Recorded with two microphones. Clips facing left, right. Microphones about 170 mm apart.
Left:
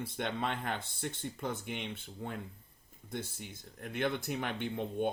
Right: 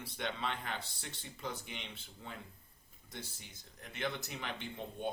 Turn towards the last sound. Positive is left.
turn(degrees=55)  # may be behind; listen again after turning